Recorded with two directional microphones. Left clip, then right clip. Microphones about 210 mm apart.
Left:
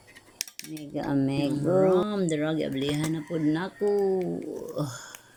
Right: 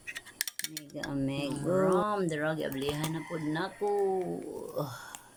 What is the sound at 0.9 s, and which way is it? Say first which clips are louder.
Speech: left 8 dB; centre (ahead or behind).